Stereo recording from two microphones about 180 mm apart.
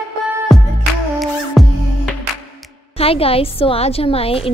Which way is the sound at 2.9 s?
30° left (ahead or behind).